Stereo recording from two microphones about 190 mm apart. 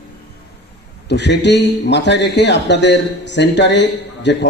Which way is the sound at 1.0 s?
65° left (ahead or behind).